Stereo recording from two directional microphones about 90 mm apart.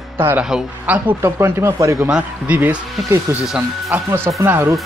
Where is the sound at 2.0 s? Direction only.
15° right (ahead or behind).